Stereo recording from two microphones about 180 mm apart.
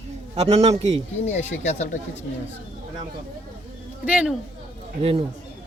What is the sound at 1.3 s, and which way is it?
Speech, 40° left (ahead or behind).